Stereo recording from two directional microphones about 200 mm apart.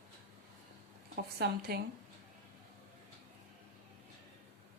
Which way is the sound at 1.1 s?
50° right (ahead or behind).